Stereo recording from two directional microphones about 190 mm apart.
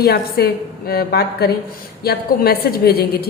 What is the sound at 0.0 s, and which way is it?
A woman's voice, 55° left (ahead or behind).